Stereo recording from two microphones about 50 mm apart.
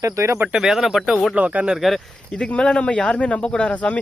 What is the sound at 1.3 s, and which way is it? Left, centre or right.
Speech, right.